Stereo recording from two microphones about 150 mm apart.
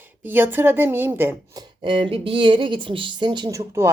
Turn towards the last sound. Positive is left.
turn(degrees=-20)  # may be behind; listen again after turning